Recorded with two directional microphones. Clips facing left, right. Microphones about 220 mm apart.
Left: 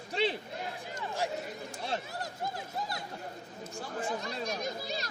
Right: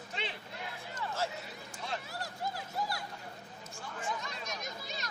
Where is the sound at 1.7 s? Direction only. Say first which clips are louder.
Left 4 dB; 35° left (ahead or behind).